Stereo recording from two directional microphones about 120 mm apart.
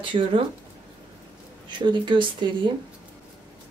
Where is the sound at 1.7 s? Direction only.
40° right (ahead or behind).